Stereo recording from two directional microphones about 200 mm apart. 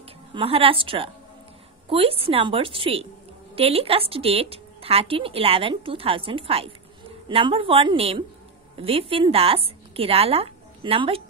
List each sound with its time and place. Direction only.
0.3 s a woman's voice: 30° right (ahead or behind)